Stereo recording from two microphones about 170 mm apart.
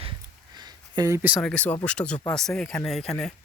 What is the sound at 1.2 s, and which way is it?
Speech, 10° right (ahead or behind).